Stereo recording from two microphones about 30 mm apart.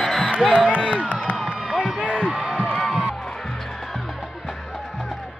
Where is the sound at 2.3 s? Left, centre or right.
Right.